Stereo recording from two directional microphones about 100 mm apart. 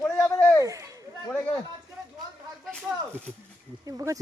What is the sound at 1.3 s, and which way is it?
Speech, 15° left (ahead or behind).